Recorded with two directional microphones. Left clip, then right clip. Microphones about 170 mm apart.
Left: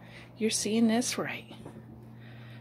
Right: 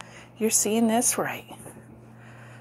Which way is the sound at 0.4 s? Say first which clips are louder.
Right 5 dB; 5° right (ahead or behind).